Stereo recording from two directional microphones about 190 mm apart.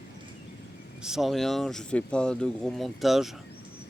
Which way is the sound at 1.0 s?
Centre (ahead or behind).